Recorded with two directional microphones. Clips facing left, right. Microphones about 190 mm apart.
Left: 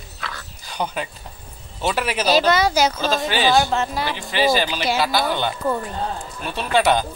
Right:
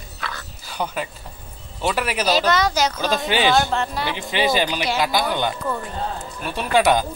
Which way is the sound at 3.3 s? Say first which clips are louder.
Right 1 dB; 20° right (ahead or behind).